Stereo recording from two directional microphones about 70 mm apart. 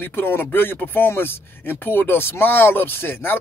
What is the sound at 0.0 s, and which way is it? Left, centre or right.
Speech, left.